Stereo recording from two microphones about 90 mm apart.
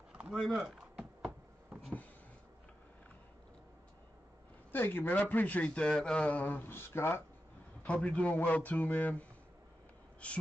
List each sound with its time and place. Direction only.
0.3 s a sound: centre (ahead or behind)
4.7 s a man's voice: 25° left (ahead or behind)
7.8 s speech: 15° left (ahead or behind)
10.2 s speech: 15° left (ahead or behind)